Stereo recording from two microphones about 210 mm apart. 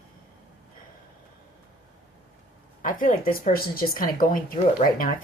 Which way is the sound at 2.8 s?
40° left (ahead or behind).